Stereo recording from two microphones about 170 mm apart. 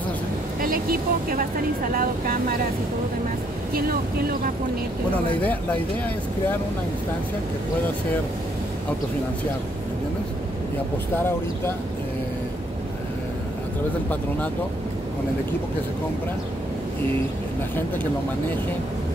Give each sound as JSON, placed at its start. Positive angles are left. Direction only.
{"t": 0.6, "sound": "a woman's voice", "side_deg": -60}
{"t": 3.7, "sound": "speech", "side_deg": -60}
{"t": 5.1, "sound": "speech", "side_deg": 10}